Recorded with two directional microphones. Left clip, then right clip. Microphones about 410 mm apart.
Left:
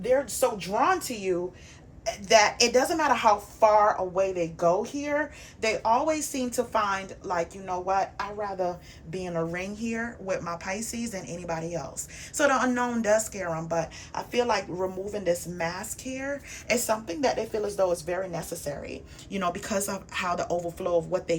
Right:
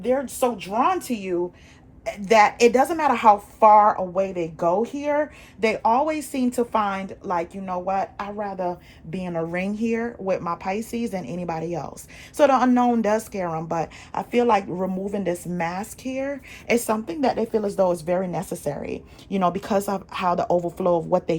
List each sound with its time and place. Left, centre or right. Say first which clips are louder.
0.0 s a woman's voice: right 2 dB; centre